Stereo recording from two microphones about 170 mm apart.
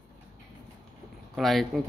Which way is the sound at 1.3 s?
Centre (ahead or behind).